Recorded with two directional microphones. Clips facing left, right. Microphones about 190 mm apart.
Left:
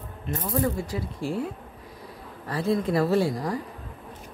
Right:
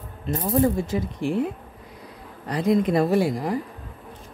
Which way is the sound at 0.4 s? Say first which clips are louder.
Right 6 dB; 25° right (ahead or behind).